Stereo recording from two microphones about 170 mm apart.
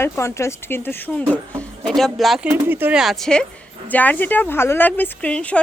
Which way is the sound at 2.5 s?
10° right (ahead or behind).